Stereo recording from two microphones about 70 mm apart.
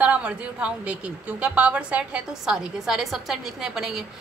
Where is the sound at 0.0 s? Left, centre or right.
Centre.